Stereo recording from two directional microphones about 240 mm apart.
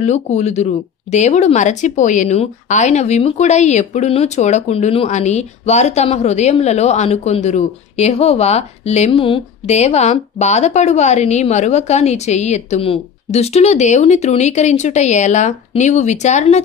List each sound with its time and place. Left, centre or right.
0.0 s speech: left